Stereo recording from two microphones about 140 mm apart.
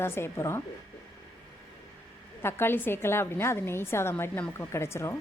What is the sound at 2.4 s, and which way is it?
A woman's voice, 15° left (ahead or behind).